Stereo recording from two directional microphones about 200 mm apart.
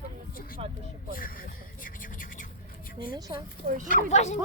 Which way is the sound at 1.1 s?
45° left (ahead or behind).